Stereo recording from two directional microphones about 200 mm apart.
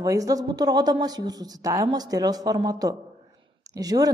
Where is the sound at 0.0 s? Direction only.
15° right (ahead or behind).